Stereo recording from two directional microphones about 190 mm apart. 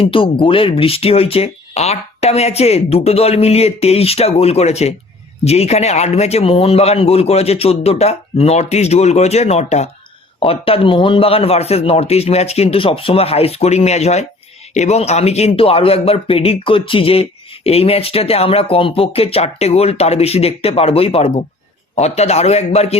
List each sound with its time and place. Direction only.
0.0 s speech: 30° left (ahead or behind)